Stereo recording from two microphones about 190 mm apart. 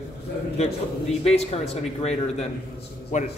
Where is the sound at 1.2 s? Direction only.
35° left (ahead or behind).